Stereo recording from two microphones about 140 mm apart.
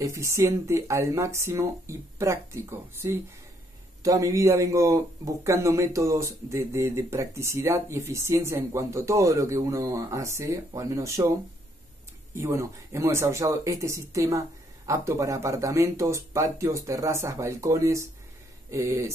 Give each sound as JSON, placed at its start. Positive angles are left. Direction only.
{"t": 0.0, "sound": "speech", "side_deg": -20}
{"t": 12.4, "sound": "speech", "side_deg": -20}